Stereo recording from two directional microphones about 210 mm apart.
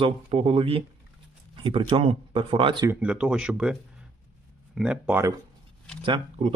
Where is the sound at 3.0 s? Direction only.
5° right (ahead or behind).